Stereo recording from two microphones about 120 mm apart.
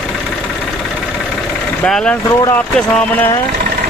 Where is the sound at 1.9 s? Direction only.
5° left (ahead or behind).